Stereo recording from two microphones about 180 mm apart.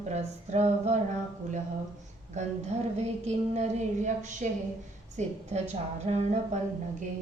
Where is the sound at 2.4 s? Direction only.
40° right (ahead or behind).